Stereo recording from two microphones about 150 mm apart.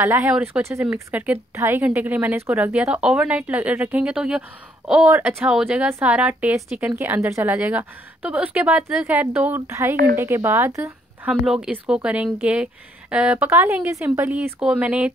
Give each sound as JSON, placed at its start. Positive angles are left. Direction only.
{"t": 0.0, "sound": "a woman's voice", "side_deg": -15}